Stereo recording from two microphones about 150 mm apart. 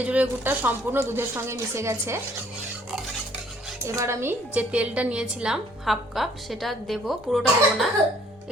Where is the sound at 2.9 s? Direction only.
5° right (ahead or behind).